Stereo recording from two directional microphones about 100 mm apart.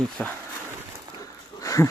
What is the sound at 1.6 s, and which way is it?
Wheeze, 30° left (ahead or behind).